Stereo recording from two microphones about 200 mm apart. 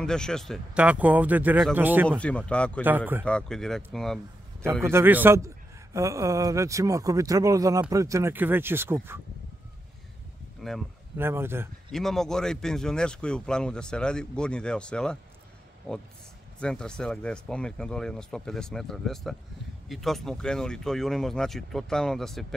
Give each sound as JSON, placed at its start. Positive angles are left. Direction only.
{"t": 0.0, "sound": "speech", "side_deg": 5}
{"t": 2.0, "sound": "speech", "side_deg": 5}
{"t": 4.8, "sound": "speech", "side_deg": -10}
{"t": 10.6, "sound": "speech", "side_deg": 0}
{"t": 11.1, "sound": "speech", "side_deg": -10}
{"t": 11.9, "sound": "speech", "side_deg": 0}
{"t": 16.5, "sound": "speech", "side_deg": 5}